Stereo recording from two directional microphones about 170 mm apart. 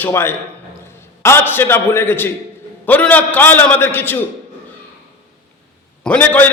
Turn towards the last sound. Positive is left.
turn(degrees=10)  # may be behind; listen again after turning